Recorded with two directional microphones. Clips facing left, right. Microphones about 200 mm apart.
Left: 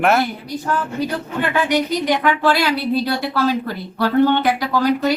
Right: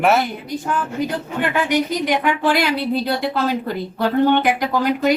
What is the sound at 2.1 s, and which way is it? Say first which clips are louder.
A woman's voice: left 3 dB; 15° right (ahead or behind).